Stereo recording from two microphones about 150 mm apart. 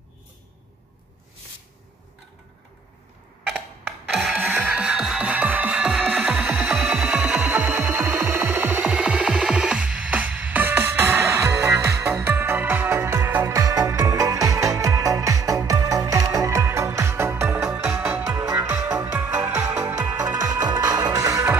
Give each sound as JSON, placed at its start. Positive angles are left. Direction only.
{"t": 4.4, "sound": "music", "side_deg": -15}